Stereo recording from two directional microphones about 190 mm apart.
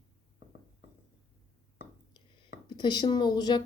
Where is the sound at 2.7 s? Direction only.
25° left (ahead or behind).